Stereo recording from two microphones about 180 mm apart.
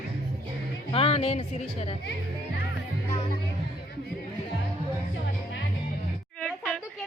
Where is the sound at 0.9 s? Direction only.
30° left (ahead or behind).